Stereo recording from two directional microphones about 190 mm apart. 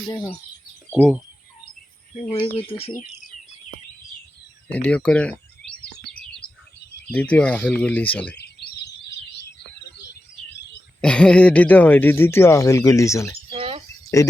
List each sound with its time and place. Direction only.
0.1 s speech: 20° left (ahead or behind)
0.9 s speech: centre (ahead or behind)
2.2 s speech: 30° left (ahead or behind)
4.7 s bird: 5° left (ahead or behind)
7.1 s speech: 5° left (ahead or behind)
8.4 s a sound: 60° left (ahead or behind)
11.0 s speech: 5° left (ahead or behind)
13.5 s a sound: 30° right (ahead or behind)
14.2 s speech: 15° left (ahead or behind)